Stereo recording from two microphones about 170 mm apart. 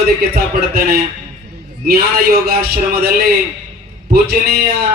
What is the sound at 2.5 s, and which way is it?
Speech, 65° right (ahead or behind).